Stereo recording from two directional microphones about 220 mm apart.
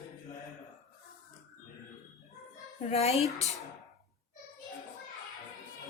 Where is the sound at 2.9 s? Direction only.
30° left (ahead or behind).